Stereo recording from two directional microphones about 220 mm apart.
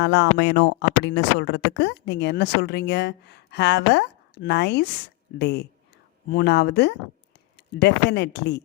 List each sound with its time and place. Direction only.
0.0 s speech: 50° left (ahead or behind)